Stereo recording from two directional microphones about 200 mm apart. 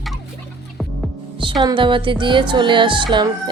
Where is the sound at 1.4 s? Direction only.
20° right (ahead or behind).